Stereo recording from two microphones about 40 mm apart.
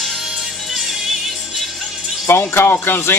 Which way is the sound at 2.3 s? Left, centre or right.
Left.